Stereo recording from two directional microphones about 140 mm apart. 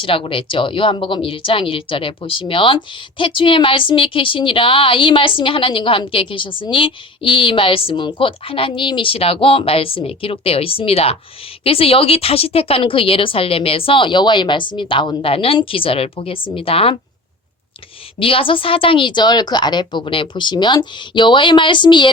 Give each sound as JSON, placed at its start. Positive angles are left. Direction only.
{"t": 0.0, "sound": "speech", "side_deg": 40}
{"t": 18.2, "sound": "speech", "side_deg": 40}